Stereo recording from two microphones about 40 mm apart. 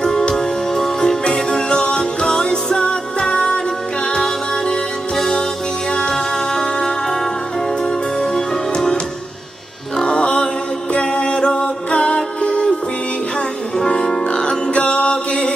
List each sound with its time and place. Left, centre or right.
0.3 s music: centre
9.9 s chant: left
12.4 s music: left
13.8 s music: centre